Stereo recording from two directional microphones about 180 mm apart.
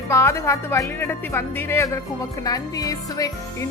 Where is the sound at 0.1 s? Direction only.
15° left (ahead or behind).